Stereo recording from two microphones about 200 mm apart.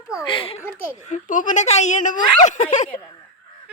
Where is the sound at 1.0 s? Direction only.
40° left (ahead or behind).